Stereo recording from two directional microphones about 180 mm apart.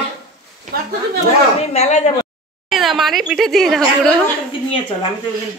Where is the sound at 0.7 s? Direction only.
60° right (ahead or behind).